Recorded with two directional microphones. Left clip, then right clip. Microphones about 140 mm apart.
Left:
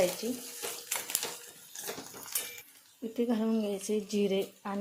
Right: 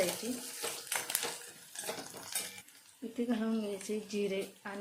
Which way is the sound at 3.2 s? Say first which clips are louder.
Left 5 dB; 35° left (ahead or behind).